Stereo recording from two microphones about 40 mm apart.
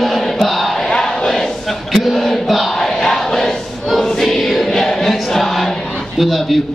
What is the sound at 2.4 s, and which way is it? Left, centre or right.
Crowd, centre.